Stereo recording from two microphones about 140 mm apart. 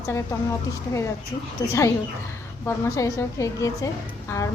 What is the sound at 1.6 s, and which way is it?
A woman's voice, 25° left (ahead or behind).